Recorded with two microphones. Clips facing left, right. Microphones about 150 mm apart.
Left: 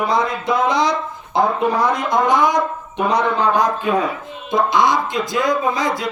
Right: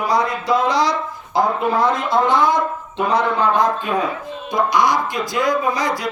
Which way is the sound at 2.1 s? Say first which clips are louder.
Left 1 dB; 15° left (ahead or behind).